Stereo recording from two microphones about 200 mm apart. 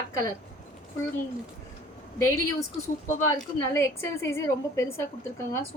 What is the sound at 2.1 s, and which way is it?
Speech, 15° left (ahead or behind).